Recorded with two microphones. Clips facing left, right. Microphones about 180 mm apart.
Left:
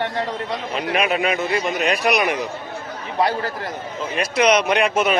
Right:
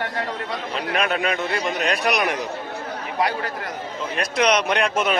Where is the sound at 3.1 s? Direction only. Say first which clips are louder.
Left 3 dB; 30° left (ahead or behind).